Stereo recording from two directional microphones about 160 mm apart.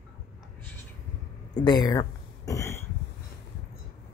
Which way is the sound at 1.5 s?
25° left (ahead or behind).